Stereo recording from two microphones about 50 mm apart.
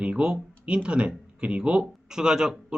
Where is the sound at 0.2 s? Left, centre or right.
Right.